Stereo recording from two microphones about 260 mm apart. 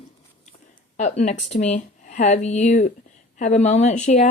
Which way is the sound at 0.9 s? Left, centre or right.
Left.